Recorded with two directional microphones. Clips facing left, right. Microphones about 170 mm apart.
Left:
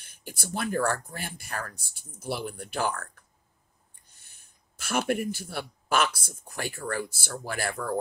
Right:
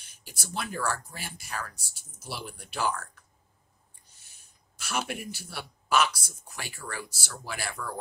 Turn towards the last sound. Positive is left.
turn(degrees=50)  # may be behind; listen again after turning